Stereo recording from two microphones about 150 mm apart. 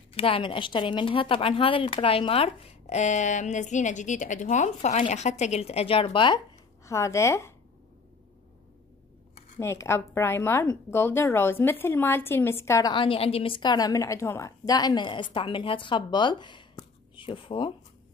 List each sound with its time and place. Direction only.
0.1 s speech: 40° left (ahead or behind)
6.8 s speech: 20° left (ahead or behind)
9.6 s a woman's voice: 15° left (ahead or behind)
12.9 s a woman's voice: 35° left (ahead or behind)